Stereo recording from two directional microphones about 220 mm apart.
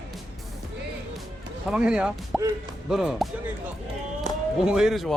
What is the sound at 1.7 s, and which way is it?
Speech, 5° right (ahead or behind).